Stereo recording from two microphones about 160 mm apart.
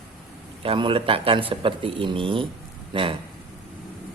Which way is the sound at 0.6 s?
35° right (ahead or behind).